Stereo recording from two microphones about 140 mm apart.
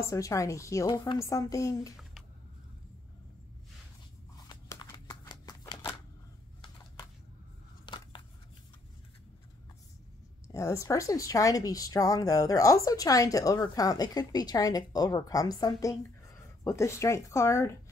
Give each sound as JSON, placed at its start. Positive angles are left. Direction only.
{"t": 0.0, "sound": "speech", "side_deg": 25}
{"t": 0.8, "sound": "a woman's voice", "side_deg": 35}
{"t": 4.5, "sound": "a sound", "side_deg": 30}
{"t": 5.3, "sound": "shuffling cards", "side_deg": 30}
{"t": 7.8, "sound": "a sound", "side_deg": 35}
{"t": 10.5, "sound": "speech", "side_deg": 20}